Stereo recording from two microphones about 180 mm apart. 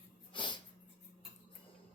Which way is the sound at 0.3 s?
25° left (ahead or behind).